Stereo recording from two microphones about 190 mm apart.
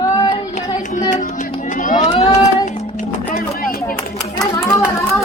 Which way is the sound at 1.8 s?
40° left (ahead or behind).